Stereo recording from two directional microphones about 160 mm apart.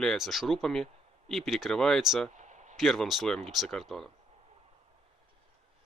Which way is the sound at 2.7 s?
Centre (ahead or behind).